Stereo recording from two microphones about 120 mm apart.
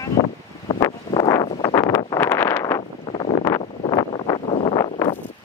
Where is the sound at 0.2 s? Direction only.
40° left (ahead or behind).